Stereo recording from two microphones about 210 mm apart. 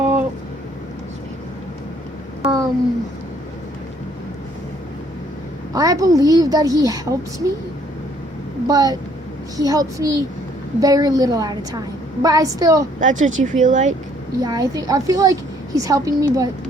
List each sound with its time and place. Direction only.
2.4 s a sound: 15° right (ahead or behind)
5.7 s a woman's voice: 15° right (ahead or behind)
8.6 s a woman's voice: 15° right (ahead or behind)
13.0 s speech: 35° right (ahead or behind)
14.4 s a woman's voice: 15° right (ahead or behind)